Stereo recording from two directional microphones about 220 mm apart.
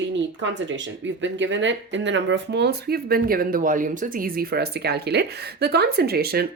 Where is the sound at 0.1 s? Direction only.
55° right (ahead or behind).